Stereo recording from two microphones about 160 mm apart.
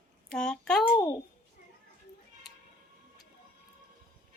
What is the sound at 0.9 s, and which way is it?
Speech, 20° left (ahead or behind).